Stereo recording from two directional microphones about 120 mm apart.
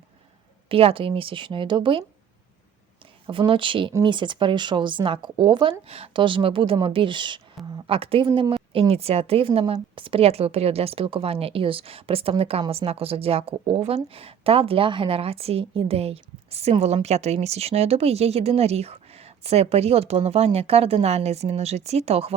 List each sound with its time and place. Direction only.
0.7 s speech: 50° right (ahead or behind)
3.2 s speech: 45° right (ahead or behind)